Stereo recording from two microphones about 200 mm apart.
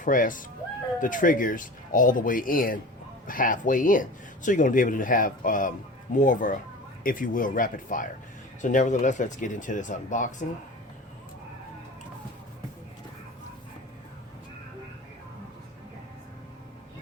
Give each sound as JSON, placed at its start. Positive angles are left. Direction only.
{"t": 0.0, "sound": "speech", "side_deg": 40}